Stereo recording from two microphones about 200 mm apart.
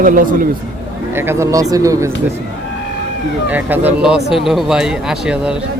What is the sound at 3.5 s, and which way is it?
Speech, 10° right (ahead or behind).